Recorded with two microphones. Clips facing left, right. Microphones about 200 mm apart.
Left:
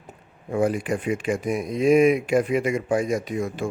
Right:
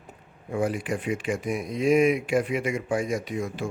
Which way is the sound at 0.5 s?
45° left (ahead or behind).